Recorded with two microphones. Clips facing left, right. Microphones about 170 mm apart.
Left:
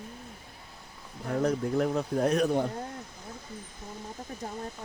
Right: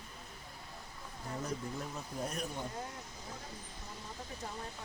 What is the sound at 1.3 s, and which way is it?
Speech, 65° left (ahead or behind).